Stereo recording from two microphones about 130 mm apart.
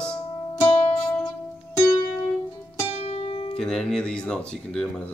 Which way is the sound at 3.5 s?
5° left (ahead or behind).